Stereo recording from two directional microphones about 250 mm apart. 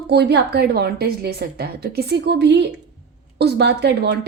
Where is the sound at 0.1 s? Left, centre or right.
Right.